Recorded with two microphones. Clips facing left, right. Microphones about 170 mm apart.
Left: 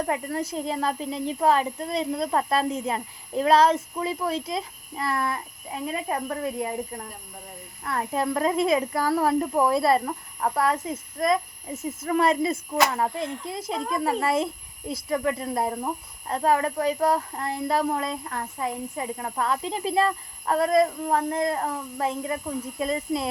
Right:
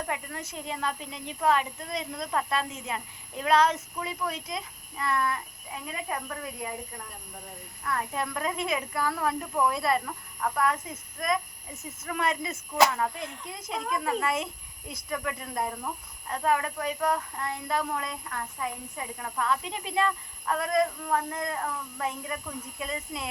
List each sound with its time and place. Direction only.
0.0 s speech: 35° left (ahead or behind)